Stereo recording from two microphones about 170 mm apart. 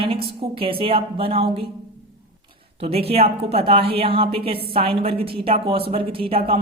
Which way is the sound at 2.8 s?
35° right (ahead or behind).